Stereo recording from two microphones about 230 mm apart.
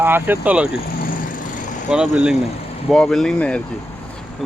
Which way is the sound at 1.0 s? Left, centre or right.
Left.